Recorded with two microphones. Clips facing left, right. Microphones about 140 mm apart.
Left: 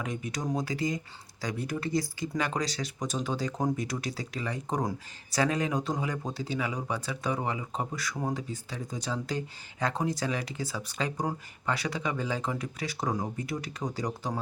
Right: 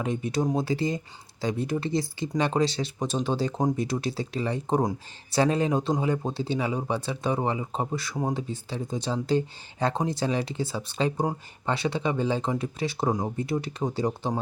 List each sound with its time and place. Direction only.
0.0 s speech: 30° right (ahead or behind)